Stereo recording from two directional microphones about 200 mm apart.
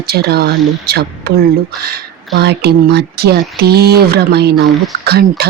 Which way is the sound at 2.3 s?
55° right (ahead or behind).